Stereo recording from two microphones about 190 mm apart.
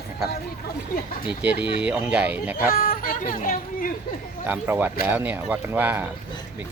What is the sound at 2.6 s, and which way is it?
Speech, 50° left (ahead or behind).